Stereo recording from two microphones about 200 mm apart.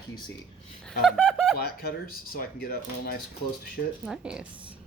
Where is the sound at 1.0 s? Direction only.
5° right (ahead or behind).